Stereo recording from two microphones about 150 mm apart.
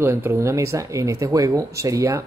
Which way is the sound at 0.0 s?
15° right (ahead or behind).